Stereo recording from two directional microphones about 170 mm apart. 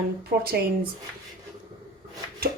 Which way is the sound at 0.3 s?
65° right (ahead or behind).